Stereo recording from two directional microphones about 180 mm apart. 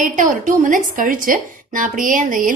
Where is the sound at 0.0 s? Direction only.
45° right (ahead or behind).